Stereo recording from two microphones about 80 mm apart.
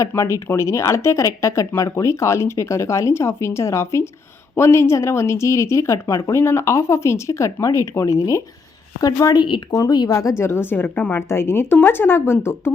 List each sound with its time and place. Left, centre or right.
0.1 s speech: left
9.3 s speech: left
9.7 s speech: left
10.2 s speech: left